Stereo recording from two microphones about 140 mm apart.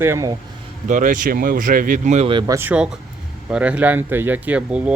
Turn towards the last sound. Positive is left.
turn(degrees=-10)  # may be behind; listen again after turning